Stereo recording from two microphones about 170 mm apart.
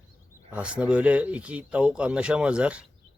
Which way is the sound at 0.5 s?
5° right (ahead or behind).